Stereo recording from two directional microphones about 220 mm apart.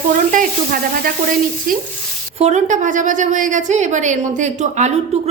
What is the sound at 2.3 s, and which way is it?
A woman's voice, 30° right (ahead or behind).